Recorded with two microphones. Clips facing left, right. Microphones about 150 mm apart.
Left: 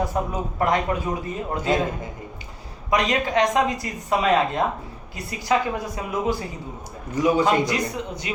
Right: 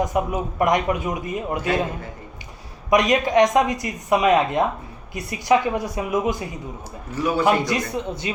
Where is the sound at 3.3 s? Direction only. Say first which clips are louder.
Right 4 dB; 20° right (ahead or behind).